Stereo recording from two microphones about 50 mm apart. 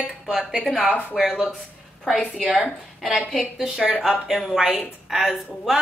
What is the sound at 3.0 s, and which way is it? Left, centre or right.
A woman's voice, centre.